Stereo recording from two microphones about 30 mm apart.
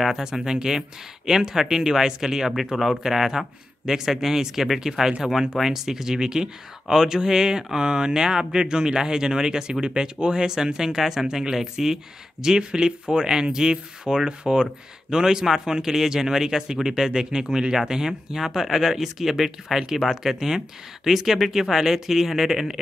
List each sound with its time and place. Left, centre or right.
0.0 s speech: centre